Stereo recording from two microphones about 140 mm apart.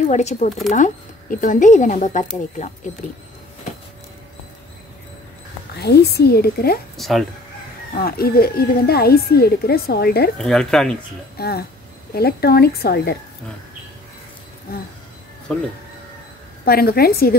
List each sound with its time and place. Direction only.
0.0 s speech: 55° left (ahead or behind)
6.2 s a woman's voice: 90° left
7.0 s speech: centre (ahead or behind)
7.9 s a woman's voice: 90° left
10.3 s speech: 5° left (ahead or behind)
11.4 s a woman's voice: 90° left
16.6 s a woman's voice: 90° left